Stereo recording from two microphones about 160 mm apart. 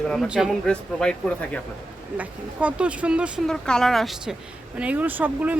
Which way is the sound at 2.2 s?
10° right (ahead or behind).